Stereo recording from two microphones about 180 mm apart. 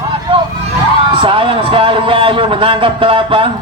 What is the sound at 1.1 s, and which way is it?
A man's voice, 30° right (ahead or behind).